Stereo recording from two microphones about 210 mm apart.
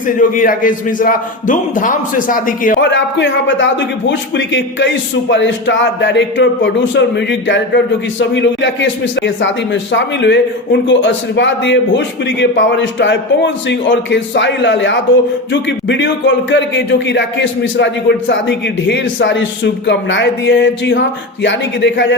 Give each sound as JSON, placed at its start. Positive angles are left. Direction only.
{"t": 0.2, "sound": "a man's voice", "side_deg": 40}
{"t": 2.8, "sound": "a man's voice", "side_deg": 60}